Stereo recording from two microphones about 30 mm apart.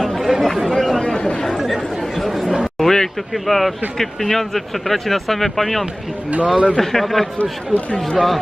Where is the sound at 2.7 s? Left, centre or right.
Centre.